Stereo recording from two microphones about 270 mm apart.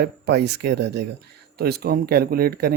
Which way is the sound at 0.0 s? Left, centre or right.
Right.